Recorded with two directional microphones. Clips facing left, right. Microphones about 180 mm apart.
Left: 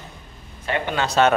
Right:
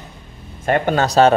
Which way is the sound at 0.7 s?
45° right (ahead or behind).